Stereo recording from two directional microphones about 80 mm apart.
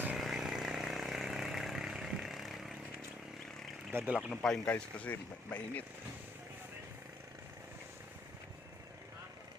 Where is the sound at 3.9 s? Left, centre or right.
Right.